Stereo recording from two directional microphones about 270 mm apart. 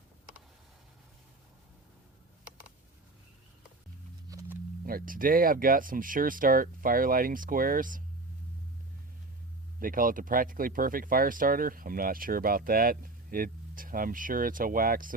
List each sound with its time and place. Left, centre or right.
4.3 s wild animals: centre
4.9 s speech: right
9.8 s speech: right